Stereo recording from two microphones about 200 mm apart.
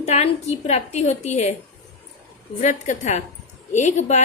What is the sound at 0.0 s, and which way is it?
A woman's voice, 35° left (ahead or behind).